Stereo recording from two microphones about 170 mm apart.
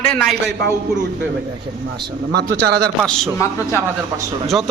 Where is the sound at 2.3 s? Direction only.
75° right (ahead or behind).